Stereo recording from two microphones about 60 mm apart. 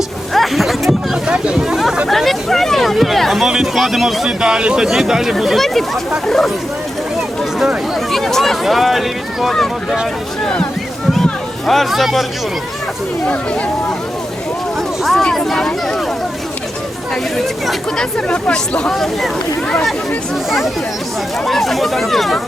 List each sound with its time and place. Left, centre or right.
0.3 s a sound: centre
0.9 s a sound: centre
2.0 s speech: centre
3.4 s speech: centre
8.1 s speech: centre
11.1 s speech: centre
15.0 s speech: centre
17.3 s speech: centre
18.3 s speech: centre
21.4 s speech: centre